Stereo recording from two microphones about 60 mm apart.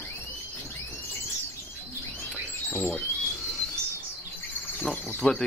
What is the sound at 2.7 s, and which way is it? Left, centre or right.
Speech, left.